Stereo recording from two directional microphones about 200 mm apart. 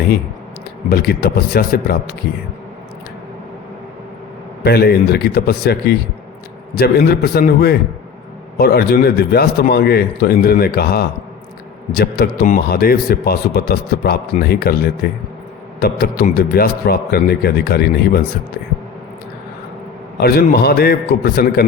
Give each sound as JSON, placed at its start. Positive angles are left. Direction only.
{"t": 0.9, "sound": "a man's voice", "side_deg": 50}
{"t": 4.6, "sound": "a man's voice", "side_deg": 50}
{"t": 20.1, "sound": "a man's voice", "side_deg": 50}